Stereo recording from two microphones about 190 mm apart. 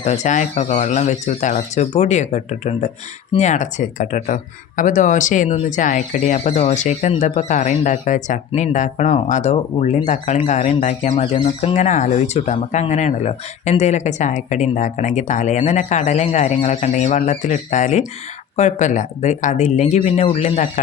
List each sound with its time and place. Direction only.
0.0 s speech: 40° left (ahead or behind)